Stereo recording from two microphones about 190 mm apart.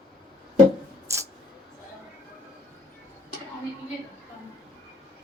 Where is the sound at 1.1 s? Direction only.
15° right (ahead or behind).